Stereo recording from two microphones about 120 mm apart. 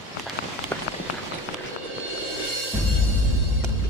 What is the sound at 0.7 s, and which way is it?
Run, 15° left (ahead or behind).